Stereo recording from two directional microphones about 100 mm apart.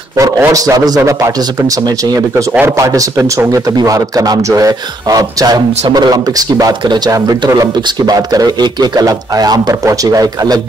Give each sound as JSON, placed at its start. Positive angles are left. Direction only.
{"t": 0.2, "sound": "a man's voice", "side_deg": -35}
{"t": 2.8, "sound": "a man's voice", "side_deg": -35}